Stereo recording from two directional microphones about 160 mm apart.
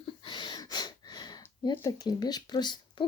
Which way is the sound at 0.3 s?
30° left (ahead or behind).